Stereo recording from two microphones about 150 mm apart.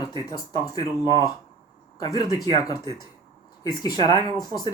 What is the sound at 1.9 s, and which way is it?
Speech, 25° left (ahead or behind).